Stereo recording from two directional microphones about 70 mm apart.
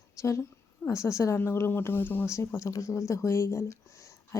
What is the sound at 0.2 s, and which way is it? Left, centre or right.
A woman's voice, left.